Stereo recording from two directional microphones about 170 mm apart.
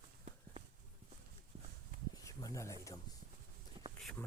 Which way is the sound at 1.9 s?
50° right (ahead or behind).